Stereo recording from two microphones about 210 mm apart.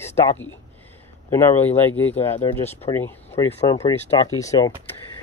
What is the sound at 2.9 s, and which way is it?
Speech, 10° left (ahead or behind).